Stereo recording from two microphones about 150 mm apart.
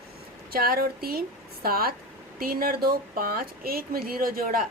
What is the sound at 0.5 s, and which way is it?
A woman's voice, 85° right.